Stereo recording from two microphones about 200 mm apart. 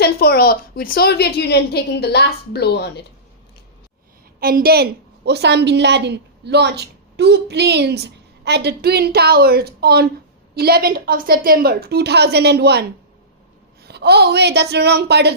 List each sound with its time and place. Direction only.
0.0 s a woman's voice: 50° left (ahead or behind)
4.4 s a woman's voice: 45° right (ahead or behind)
13.8 s a woman's voice: 55° right (ahead or behind)